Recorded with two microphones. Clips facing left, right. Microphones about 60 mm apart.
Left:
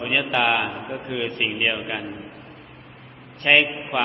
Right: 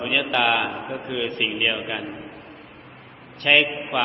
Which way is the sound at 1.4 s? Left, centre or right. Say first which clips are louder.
Left 1 dB; centre.